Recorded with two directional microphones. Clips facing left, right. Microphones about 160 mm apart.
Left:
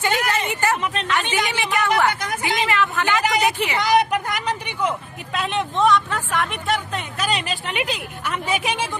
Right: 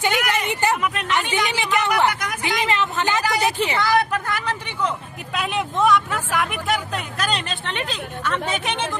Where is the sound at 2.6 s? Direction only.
20° right (ahead or behind).